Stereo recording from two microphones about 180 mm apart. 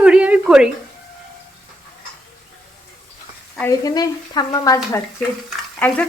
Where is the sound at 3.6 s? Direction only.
20° left (ahead or behind).